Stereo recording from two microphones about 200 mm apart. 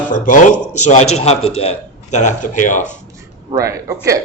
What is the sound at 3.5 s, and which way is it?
Speech, 15° right (ahead or behind).